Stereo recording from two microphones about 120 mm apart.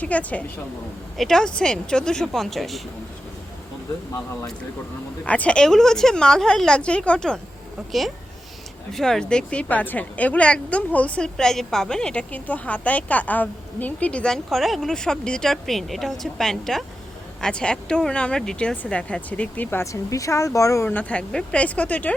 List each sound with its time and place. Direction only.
0.0 s a woman's voice: 10° left (ahead or behind)
5.2 s a woman's voice: 10° left (ahead or behind)
8.9 s a woman's voice: 5° left (ahead or behind)
19.8 s a woman's voice: 25° left (ahead or behind)
20.9 s a woman's voice: 10° left (ahead or behind)